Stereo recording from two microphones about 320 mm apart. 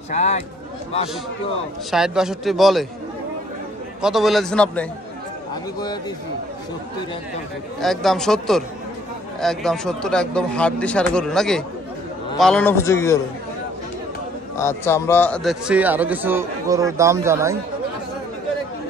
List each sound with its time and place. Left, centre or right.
0.1 s speech: left
1.9 s a man's voice: centre
4.0 s a man's voice: centre
7.8 s a man's voice: centre
14.6 s a man's voice: centre